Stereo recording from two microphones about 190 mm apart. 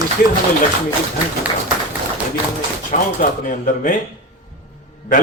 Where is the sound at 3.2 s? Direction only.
45° left (ahead or behind).